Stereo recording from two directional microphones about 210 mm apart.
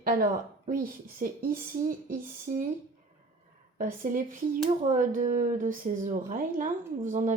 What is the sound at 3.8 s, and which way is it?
Speech, 40° right (ahead or behind).